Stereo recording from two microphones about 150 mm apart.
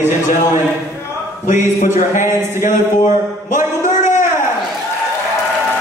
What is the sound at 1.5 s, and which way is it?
Speech, 60° left (ahead or behind).